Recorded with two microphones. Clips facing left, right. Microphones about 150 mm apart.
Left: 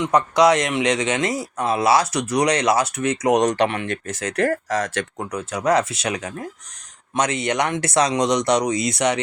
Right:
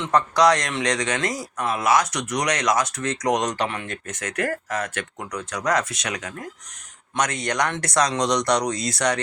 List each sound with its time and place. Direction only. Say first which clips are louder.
0.0 s speech: left 2 dB; 20° left (ahead or behind)
3.4 s speech: left 6 dB; 65° left (ahead or behind)
4.1 s speech: left 5 dB; 30° left (ahead or behind)